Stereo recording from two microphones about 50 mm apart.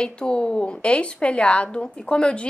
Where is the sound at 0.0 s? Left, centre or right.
Centre.